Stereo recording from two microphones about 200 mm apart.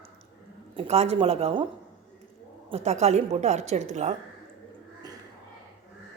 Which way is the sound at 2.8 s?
35° right (ahead or behind).